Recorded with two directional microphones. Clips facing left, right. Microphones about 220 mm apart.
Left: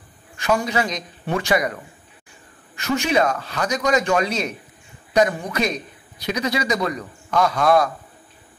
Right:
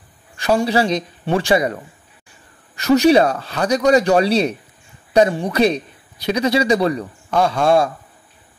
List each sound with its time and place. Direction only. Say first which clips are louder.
0.4 s a man's voice: right 5 dB; 30° right (ahead or behind)
2.7 s a man's voice: right 9 dB; 40° right (ahead or behind)